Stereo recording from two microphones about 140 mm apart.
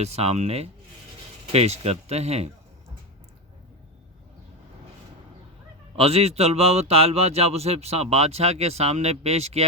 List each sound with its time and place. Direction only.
0.0 s speech: 45° right (ahead or behind)
6.0 s speech: 45° right (ahead or behind)